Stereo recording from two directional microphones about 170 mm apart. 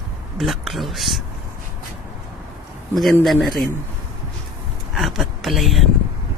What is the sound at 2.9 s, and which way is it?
Speech, centre (ahead or behind).